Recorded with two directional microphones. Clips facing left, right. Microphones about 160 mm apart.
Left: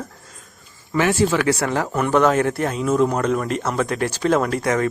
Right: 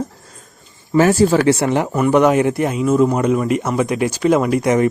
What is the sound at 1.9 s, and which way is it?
Speech, 10° right (ahead or behind).